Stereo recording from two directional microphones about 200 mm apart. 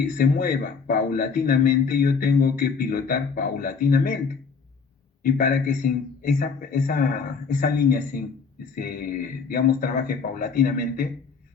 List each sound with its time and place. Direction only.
0.2 s a man's voice: 45° left (ahead or behind)
5.2 s a man's voice: 45° left (ahead or behind)